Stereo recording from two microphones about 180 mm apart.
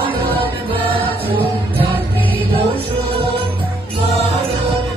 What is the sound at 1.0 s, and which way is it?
Music, 30° right (ahead or behind).